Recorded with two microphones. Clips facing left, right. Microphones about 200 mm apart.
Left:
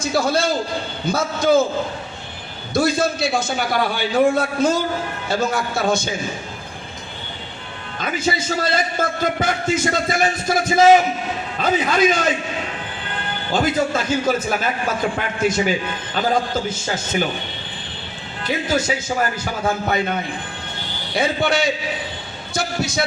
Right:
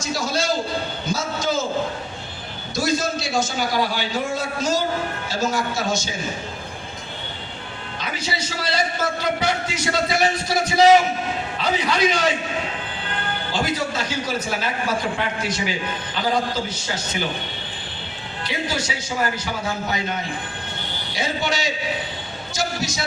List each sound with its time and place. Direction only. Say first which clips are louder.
0.0 s a man's voice: left 5 dB; 60° left (ahead or behind)
2.7 s a man's voice: left 4 dB; 55° left (ahead or behind)
7.9 s a man's voice: left 7 dB; 50° left (ahead or behind)
13.5 s a man's voice: left 6 dB; 50° left (ahead or behind)
18.4 s a man's voice: left 6 dB; 50° left (ahead or behind)
21.2 s a man's voice: left 6 dB; 55° left (ahead or behind)